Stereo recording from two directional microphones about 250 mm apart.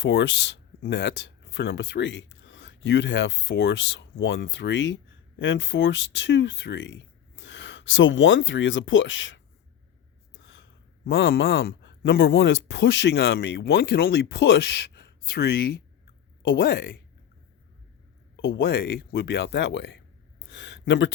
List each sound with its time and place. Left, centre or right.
0.0 s speech: left
10.3 s gasp: left
11.0 s speech: left
18.3 s speech: left
20.4 s a sound: left